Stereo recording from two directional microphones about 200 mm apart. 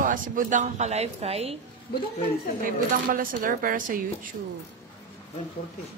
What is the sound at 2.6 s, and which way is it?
A woman's voice, 45° right (ahead or behind).